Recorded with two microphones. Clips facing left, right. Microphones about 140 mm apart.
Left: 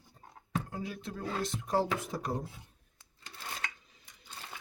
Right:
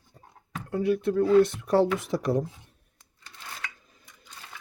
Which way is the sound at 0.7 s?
65° right (ahead or behind).